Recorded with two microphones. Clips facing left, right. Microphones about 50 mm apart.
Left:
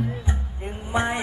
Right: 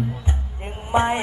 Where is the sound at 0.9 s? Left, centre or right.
Right.